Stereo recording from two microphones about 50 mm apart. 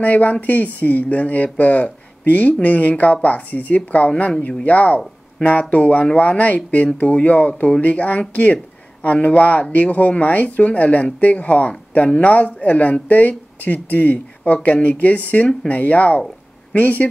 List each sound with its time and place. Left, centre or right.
0.0 s speech: left